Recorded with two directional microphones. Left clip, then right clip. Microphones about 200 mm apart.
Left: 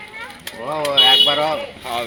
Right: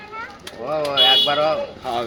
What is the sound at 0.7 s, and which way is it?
Speech, 40° left (ahead or behind).